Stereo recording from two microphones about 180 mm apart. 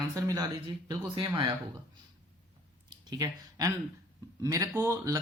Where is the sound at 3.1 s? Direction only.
20° right (ahead or behind).